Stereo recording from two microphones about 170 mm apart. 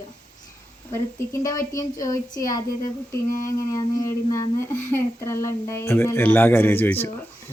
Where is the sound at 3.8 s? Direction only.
20° left (ahead or behind).